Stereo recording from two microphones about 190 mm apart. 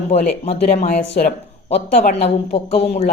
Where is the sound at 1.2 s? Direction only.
45° left (ahead or behind).